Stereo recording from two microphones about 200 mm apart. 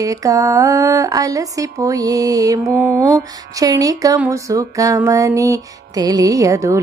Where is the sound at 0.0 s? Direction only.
15° right (ahead or behind).